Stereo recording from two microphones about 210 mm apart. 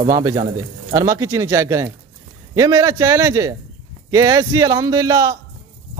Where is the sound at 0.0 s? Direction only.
20° right (ahead or behind).